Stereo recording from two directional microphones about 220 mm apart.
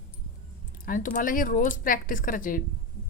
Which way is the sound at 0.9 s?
35° left (ahead or behind).